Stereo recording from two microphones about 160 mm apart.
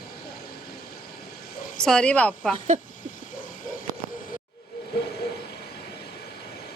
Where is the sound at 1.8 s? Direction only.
5° left (ahead or behind).